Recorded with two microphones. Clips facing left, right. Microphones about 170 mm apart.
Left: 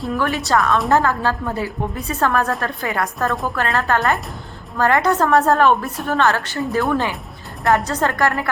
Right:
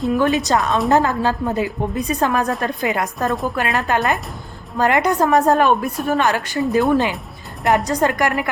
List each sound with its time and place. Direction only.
0.0 s a woman's voice: 20° right (ahead or behind)